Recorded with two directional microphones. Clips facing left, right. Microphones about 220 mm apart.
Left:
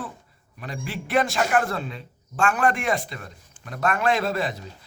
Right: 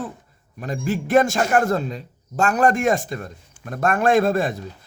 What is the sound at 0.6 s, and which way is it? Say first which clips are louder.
A man's voice: right 8 dB; 45° right (ahead or behind).